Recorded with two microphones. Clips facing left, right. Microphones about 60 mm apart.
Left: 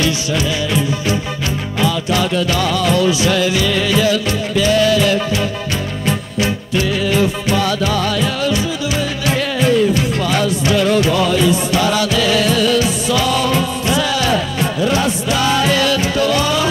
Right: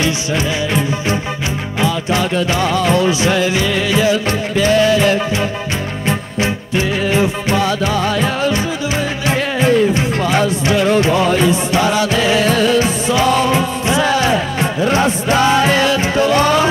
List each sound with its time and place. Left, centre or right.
0.0 s music: right
4.3 s music: right